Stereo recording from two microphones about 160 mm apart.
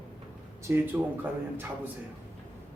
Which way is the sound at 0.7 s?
15° right (ahead or behind).